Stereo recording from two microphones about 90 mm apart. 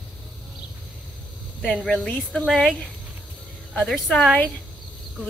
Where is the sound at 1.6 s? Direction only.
10° left (ahead or behind).